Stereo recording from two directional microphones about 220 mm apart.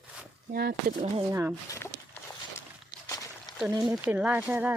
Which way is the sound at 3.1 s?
15° left (ahead or behind).